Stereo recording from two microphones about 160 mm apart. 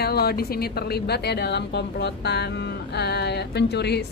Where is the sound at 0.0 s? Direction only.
80° left.